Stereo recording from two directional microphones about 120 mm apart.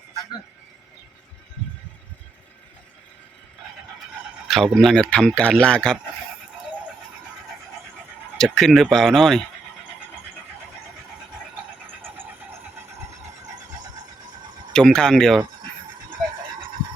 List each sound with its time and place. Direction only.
4.4 s speech: centre (ahead or behind)
8.4 s speech: 5° left (ahead or behind)
12.0 s vehicle: 20° right (ahead or behind)
14.7 s speech: 5° left (ahead or behind)